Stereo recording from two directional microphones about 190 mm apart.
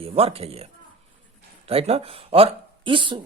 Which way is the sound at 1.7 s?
30° right (ahead or behind).